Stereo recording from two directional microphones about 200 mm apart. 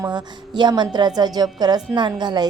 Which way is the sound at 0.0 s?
20° right (ahead or behind).